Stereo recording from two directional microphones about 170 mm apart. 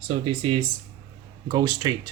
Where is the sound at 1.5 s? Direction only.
25° right (ahead or behind).